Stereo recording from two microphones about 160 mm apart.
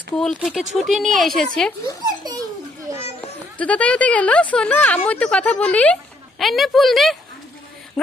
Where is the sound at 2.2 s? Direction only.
25° right (ahead or behind).